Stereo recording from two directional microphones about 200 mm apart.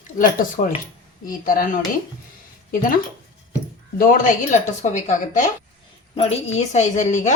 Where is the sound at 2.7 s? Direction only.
45° left (ahead or behind).